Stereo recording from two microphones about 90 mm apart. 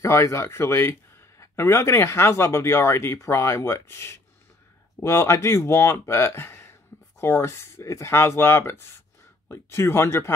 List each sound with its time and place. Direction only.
0.0 s speech: 35° left (ahead or behind)